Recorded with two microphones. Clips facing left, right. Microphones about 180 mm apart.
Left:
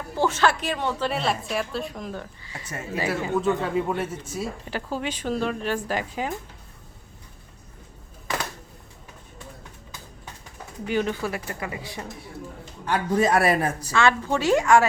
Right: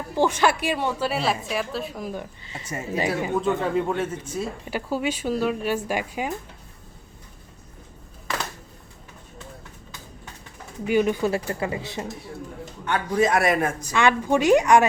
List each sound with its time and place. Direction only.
0.2 s a woman's voice: 15° right (ahead or behind)
2.4 s a woman's voice: 25° right (ahead or behind)
2.6 s a woman's voice: 10° right (ahead or behind)
3.4 s speech: 5° left (ahead or behind)
4.7 s a woman's voice: 10° right (ahead or behind)
10.8 s a woman's voice: 10° right (ahead or behind)
11.3 s a woman's voice: 30° right (ahead or behind)
12.8 s a man's voice: 35° left (ahead or behind)
13.9 s a woman's voice: 15° right (ahead or behind)